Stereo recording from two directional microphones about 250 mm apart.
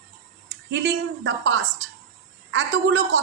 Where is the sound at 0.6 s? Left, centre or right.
Right.